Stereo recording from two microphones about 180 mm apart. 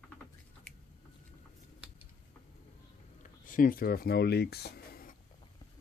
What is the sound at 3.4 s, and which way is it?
Speech, 50° left (ahead or behind).